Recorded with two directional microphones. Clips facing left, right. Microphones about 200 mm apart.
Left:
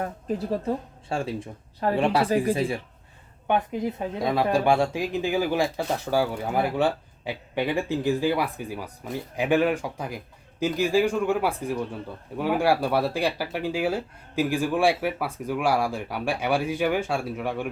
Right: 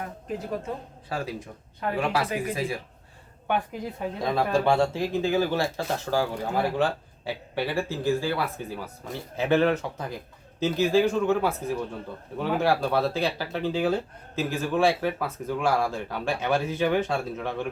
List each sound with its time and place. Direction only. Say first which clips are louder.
0.0 s speech: left 5 dB; 35° left (ahead or behind)
3.4 s speech: left 4 dB; 20° left (ahead or behind)